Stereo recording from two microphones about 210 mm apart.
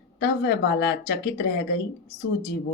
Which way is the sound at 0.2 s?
45° left (ahead or behind).